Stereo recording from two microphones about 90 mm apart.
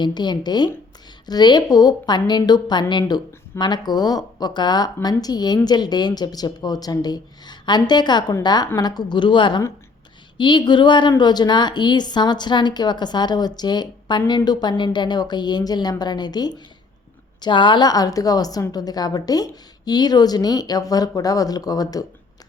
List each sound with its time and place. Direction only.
0.0 s a woman's voice: 55° left (ahead or behind)
17.4 s a woman's voice: 60° left (ahead or behind); by 22.0 s 45° left (ahead or behind)